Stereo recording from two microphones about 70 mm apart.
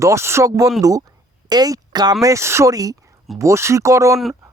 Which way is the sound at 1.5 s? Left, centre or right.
Right.